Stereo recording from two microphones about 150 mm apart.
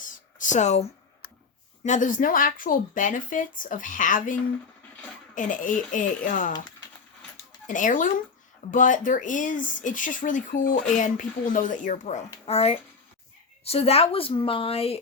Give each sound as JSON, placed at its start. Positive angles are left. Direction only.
{"t": 0.0, "sound": "a sound", "side_deg": 60}
{"t": 1.8, "sound": "speech", "side_deg": 55}
{"t": 7.7, "sound": "speech", "side_deg": 60}